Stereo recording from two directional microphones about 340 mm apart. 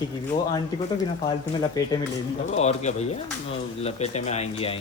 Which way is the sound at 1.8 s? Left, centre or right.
Centre.